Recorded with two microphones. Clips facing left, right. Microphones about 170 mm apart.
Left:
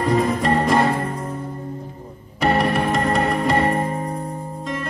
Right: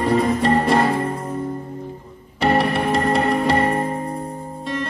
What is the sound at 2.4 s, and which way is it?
Music, 30° right (ahead or behind).